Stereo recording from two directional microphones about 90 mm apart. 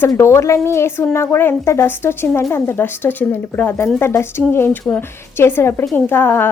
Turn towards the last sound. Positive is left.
turn(degrees=25)  # may be behind; listen again after turning